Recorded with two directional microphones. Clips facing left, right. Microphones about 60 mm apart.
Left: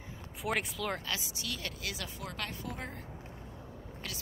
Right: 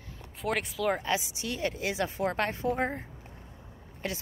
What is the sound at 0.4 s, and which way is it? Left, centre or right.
Speech, centre.